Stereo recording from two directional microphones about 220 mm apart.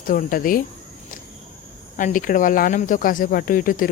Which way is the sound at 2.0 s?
35° left (ahead or behind).